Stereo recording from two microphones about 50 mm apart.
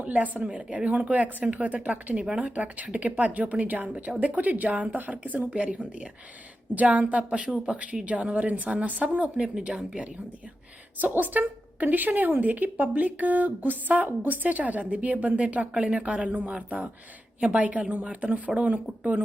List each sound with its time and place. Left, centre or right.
0.0 s a woman's voice: right
11.0 s a woman's voice: right